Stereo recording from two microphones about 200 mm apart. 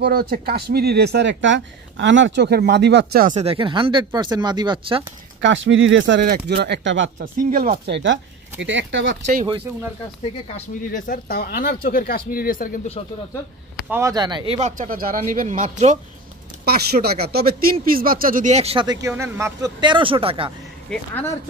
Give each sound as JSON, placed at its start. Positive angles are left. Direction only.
{"t": 0.0, "sound": "speech", "side_deg": -50}
{"t": 3.3, "sound": "speech", "side_deg": -25}
{"t": 5.4, "sound": "speech", "side_deg": -70}
{"t": 7.2, "sound": "speech", "side_deg": -45}
{"t": 9.1, "sound": "speech", "side_deg": -40}
{"t": 10.9, "sound": "speech", "side_deg": 45}
{"t": 13.8, "sound": "speech", "side_deg": -15}
{"t": 16.6, "sound": "speech", "side_deg": -50}
{"t": 20.9, "sound": "speech", "side_deg": 10}